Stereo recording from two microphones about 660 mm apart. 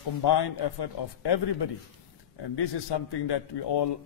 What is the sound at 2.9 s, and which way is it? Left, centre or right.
Speech, left.